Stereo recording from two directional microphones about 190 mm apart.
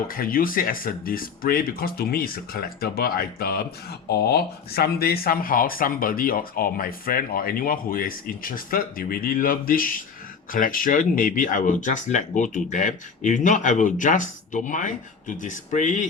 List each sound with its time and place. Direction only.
0.1 s speech: 50° left (ahead or behind)